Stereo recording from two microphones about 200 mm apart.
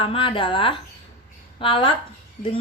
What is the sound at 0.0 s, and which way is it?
Speech, 30° left (ahead or behind).